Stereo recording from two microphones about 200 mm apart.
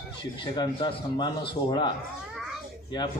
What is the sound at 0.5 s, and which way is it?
A man's voice, 20° left (ahead or behind).